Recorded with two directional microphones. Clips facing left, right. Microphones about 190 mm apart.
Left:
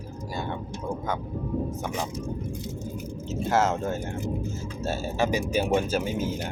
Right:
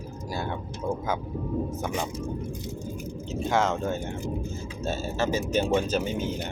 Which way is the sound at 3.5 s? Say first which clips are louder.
Left 1 dB; 5° left (ahead or behind).